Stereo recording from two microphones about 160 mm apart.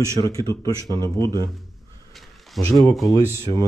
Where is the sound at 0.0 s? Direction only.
20° left (ahead or behind).